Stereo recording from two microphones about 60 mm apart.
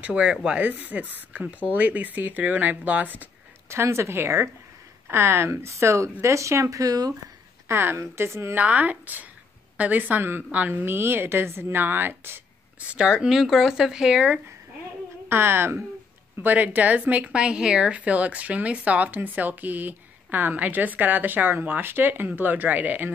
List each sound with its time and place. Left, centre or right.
0.0 s speech: right
0.6 s speech: right
3.6 s speech: right
7.6 s speech: right
8.5 s a woman's voice: right
12.8 s speech: centre
15.2 s a woman's voice: right
16.4 s speech: right
17.3 s a woman's voice: centre